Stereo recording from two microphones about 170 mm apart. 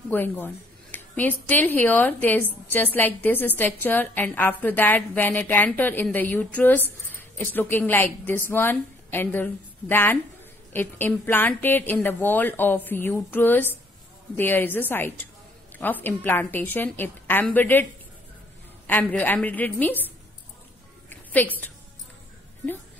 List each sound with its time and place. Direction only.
0.1 s a woman's voice: 10° left (ahead or behind)
18.9 s a woman's voice: 10° left (ahead or behind)